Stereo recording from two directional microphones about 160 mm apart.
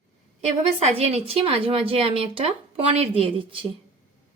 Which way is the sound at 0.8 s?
40° right (ahead or behind).